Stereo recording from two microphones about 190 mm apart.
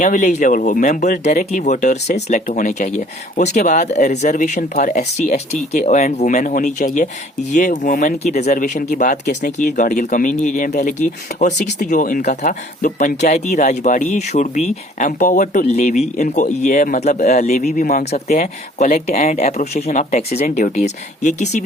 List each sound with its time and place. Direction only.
0.0 s speech: 40° left (ahead or behind)